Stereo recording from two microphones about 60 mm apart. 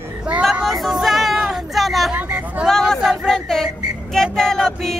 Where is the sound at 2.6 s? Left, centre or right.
Centre.